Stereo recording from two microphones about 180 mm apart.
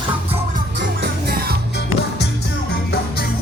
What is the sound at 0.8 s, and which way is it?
Music, 70° right (ahead or behind).